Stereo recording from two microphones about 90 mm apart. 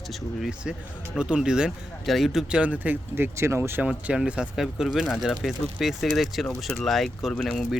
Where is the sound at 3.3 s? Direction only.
30° right (ahead or behind).